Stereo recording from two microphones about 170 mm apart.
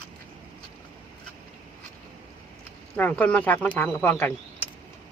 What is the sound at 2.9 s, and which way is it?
Speech, 10° left (ahead or behind).